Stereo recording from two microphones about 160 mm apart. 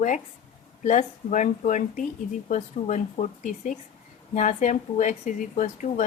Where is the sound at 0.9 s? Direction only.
50° left (ahead or behind).